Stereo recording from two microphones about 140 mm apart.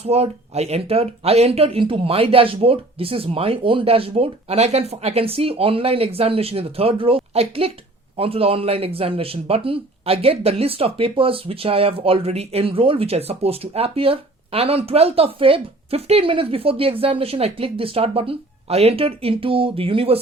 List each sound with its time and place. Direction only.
0.0 s a man's voice: 45° right (ahead or behind)